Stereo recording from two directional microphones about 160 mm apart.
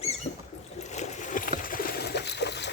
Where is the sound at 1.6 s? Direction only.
60° left (ahead or behind); by 2.7 s 90° left.